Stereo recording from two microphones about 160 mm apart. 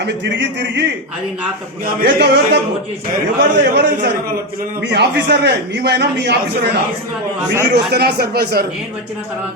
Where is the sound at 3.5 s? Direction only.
90° right.